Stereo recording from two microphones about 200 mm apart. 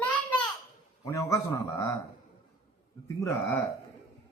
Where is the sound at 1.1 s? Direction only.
15° left (ahead or behind).